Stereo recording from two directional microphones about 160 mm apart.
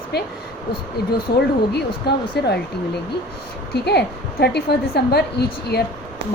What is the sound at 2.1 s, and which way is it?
Speech, 90° left.